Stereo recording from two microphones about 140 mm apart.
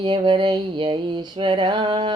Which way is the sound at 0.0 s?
35° right (ahead or behind).